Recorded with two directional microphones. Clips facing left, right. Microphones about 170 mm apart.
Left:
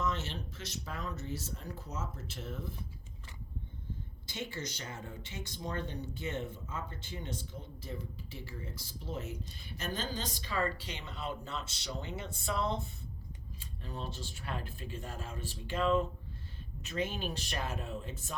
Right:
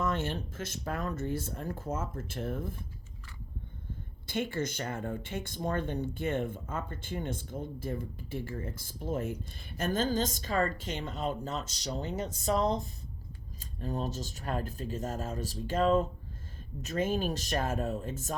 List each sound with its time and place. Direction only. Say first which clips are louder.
0.0 s speech: right 4 dB; 55° right (ahead or behind)
4.3 s speech: right 8 dB; 55° right (ahead or behind)